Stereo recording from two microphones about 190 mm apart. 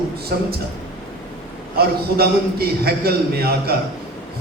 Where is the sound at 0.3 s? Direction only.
55° right (ahead or behind).